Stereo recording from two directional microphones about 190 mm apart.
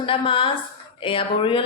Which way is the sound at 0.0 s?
30° left (ahead or behind).